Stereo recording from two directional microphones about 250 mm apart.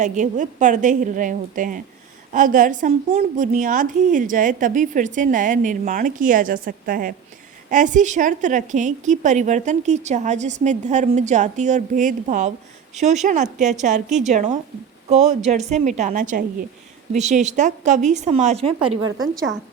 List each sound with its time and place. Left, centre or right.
0.0 s a woman's voice: right